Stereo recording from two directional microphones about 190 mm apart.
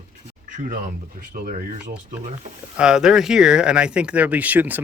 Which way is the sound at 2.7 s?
5° right (ahead or behind).